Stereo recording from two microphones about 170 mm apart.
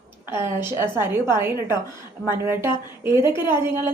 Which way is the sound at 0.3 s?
15° right (ahead or behind).